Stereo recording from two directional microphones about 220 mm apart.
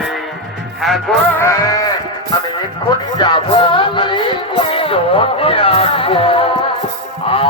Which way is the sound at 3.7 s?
20° left (ahead or behind).